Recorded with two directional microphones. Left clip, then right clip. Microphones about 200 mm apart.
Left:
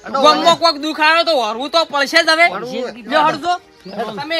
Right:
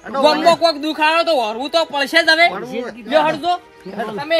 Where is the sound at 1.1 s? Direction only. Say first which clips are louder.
Left 1 dB; 10° left (ahead or behind).